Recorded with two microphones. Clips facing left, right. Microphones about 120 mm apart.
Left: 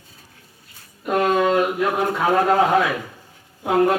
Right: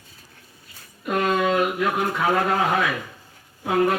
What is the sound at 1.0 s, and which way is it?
Speech, 35° left (ahead or behind).